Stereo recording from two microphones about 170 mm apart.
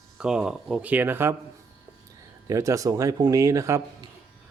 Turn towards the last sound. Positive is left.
turn(degrees=-20)  # may be behind; listen again after turning